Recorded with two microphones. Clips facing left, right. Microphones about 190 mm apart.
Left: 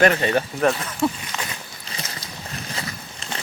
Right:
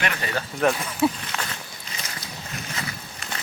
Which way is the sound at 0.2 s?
25° left (ahead or behind).